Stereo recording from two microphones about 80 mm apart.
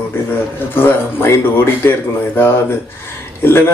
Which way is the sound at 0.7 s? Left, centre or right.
Left.